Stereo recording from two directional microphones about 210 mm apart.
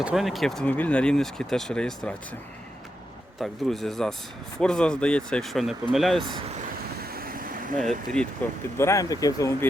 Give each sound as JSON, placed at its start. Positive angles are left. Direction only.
{"t": 0.0, "sound": "speech", "side_deg": 0}
{"t": 3.4, "sound": "speech", "side_deg": 0}
{"t": 7.0, "sound": "vehicle", "side_deg": -45}
{"t": 7.8, "sound": "speech", "side_deg": 0}
{"t": 8.8, "sound": "speech", "side_deg": 15}